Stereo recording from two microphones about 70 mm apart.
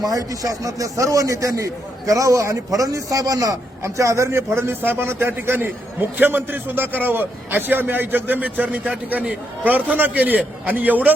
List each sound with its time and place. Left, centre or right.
0.0 s a man's voice: right